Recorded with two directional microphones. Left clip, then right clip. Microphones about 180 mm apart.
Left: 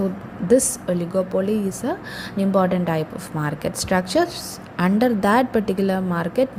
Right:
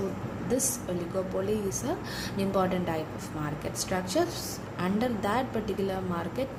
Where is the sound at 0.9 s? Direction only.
35° left (ahead or behind).